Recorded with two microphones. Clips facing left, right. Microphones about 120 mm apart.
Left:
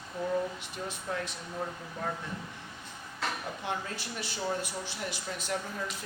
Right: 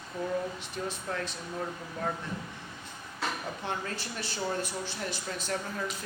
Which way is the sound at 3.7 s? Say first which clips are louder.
Even; 10° left (ahead or behind).